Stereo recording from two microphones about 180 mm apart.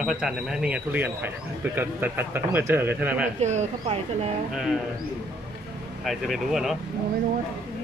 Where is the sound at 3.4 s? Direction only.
40° right (ahead or behind).